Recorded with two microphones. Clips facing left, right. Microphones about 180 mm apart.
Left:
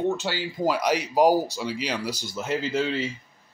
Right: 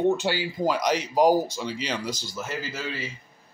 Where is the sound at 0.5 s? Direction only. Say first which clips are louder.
Left 3 dB; 5° left (ahead or behind).